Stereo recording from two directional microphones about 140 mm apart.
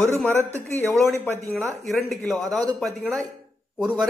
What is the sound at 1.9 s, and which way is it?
Speech, centre (ahead or behind).